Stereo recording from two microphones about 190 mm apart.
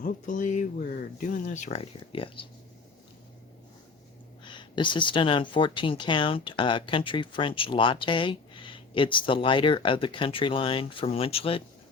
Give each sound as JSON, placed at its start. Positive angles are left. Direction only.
{"t": 0.0, "sound": "speech", "side_deg": 40}
{"t": 4.4, "sound": "speech", "side_deg": 25}